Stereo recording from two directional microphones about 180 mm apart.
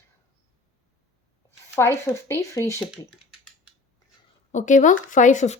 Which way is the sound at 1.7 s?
15° left (ahead or behind).